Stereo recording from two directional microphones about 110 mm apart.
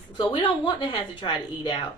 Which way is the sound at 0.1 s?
45° left (ahead or behind).